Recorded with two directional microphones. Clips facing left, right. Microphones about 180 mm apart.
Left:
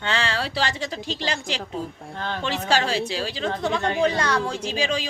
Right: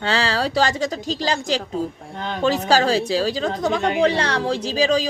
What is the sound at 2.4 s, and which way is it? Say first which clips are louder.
A woman's voice: right 7 dB; 40° right (ahead or behind).